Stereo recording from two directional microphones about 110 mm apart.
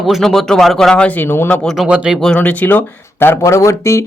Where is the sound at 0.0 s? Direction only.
Centre (ahead or behind); by 1.6 s 20° left (ahead or behind).